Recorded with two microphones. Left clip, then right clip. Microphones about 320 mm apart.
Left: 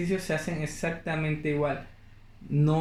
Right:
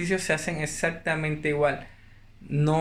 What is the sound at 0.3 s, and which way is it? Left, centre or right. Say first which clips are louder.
Speech: right 4 dB; right.